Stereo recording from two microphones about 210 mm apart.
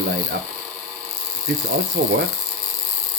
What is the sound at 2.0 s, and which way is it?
Speech, 55° right (ahead or behind).